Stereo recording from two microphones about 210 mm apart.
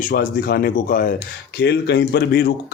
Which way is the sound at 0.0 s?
40° left (ahead or behind).